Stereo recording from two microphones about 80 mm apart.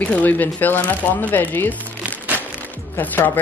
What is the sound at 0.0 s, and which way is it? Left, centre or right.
Speech, centre.